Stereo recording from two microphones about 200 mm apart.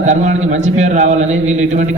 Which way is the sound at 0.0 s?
35° right (ahead or behind).